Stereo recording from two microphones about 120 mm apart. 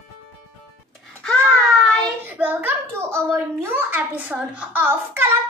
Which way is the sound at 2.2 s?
15° right (ahead or behind).